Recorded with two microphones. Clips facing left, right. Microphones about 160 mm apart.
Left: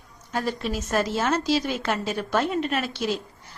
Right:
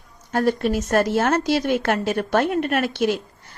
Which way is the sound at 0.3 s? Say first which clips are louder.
Right 7 dB; 55° right (ahead or behind).